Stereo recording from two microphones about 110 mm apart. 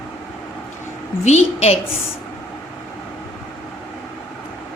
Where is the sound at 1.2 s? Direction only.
85° left.